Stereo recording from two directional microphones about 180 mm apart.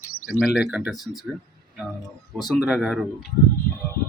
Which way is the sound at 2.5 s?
5° right (ahead or behind).